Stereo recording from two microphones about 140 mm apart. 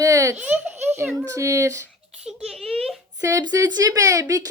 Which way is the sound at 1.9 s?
Centre (ahead or behind).